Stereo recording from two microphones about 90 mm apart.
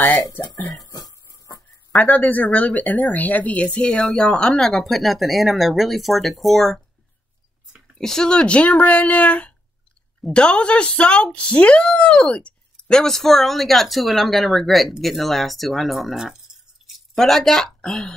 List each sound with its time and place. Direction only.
0.8 s cough: 45° left (ahead or behind)
1.9 s speech: 15° left (ahead or behind)
8.0 s speech: 5° left (ahead or behind)